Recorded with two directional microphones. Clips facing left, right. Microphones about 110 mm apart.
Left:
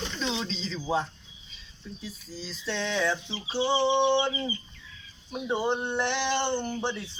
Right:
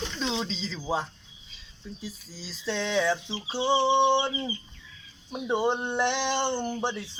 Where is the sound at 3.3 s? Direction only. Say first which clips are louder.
Right 1 dB; 30° right (ahead or behind).